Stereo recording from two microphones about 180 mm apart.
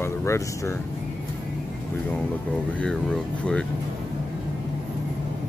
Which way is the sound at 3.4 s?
5° left (ahead or behind).